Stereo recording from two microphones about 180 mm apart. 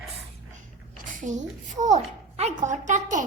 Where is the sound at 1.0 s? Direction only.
45° right (ahead or behind).